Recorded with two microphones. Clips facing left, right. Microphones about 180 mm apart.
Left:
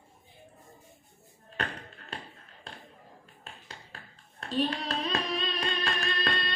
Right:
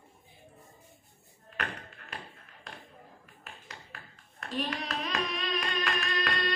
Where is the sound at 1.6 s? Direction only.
30° left (ahead or behind).